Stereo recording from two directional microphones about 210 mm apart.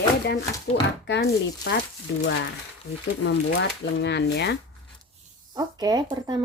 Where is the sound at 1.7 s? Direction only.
55° left (ahead or behind).